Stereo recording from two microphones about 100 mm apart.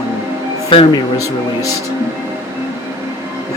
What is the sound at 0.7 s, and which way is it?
Speech, 60° left (ahead or behind).